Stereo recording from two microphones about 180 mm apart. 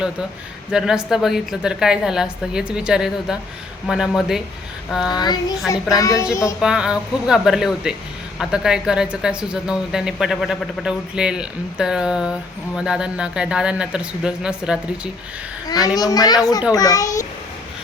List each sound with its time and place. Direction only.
0.7 s speech: 5° right (ahead or behind)
5.1 s a child's voice: 25° left (ahead or behind)
6.6 s speech: 5° right (ahead or behind)
15.6 s a child's voice: 20° left (ahead or behind)